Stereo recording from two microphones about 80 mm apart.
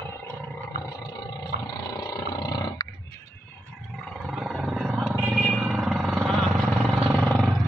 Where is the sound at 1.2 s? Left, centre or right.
Left.